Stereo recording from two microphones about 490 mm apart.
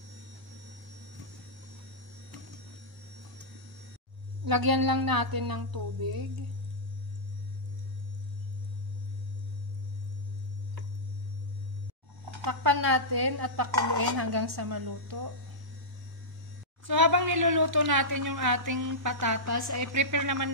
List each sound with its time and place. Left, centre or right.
4.5 s a woman's voice: right
12.4 s a woman's voice: right
16.8 s speech: right